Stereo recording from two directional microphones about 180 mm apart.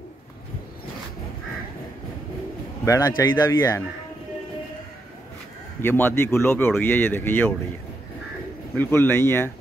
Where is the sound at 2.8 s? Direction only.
20° left (ahead or behind).